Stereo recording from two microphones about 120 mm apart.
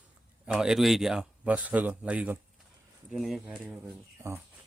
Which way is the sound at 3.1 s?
Centre (ahead or behind).